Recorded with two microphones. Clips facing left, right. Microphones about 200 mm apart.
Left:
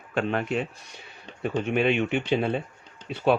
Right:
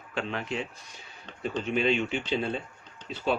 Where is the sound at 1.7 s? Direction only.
60° left (ahead or behind).